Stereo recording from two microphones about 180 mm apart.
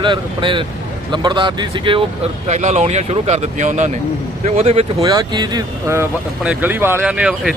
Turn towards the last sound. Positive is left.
turn(degrees=-5)  # may be behind; listen again after turning